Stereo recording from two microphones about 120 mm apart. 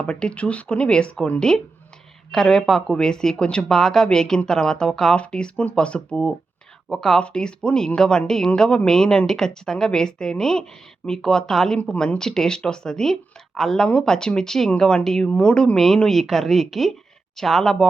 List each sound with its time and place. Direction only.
0.0 s speech: 10° left (ahead or behind)